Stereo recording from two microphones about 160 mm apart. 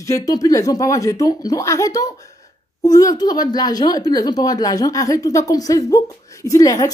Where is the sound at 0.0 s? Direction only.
20° left (ahead or behind).